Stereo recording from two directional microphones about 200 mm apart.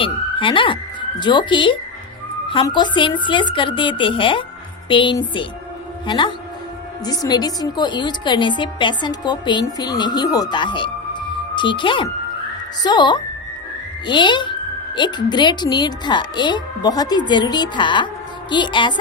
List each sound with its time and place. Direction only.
0.0 s a woman's voice: 25° left (ahead or behind)